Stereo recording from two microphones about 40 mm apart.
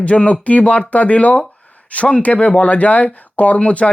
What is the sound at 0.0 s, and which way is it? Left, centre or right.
Speech, left.